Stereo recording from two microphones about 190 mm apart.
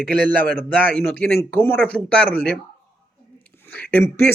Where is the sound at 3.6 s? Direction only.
10° left (ahead or behind).